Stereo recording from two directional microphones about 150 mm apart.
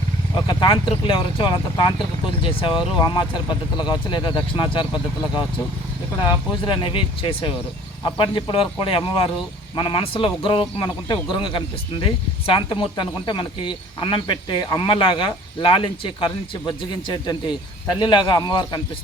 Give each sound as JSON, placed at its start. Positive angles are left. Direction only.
{"t": 0.3, "sound": "speech", "side_deg": 30}
{"t": 6.7, "sound": "speech", "side_deg": 35}